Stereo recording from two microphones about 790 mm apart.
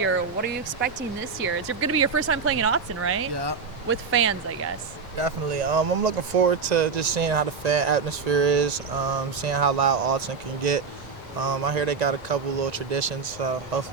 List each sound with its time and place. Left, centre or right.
0.0 s speech: centre
5.1 s speech: right